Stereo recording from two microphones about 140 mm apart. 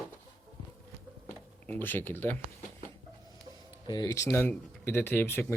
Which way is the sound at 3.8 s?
25° left (ahead or behind).